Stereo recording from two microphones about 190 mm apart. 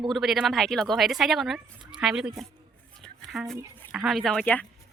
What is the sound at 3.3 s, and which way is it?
Speech, centre (ahead or behind).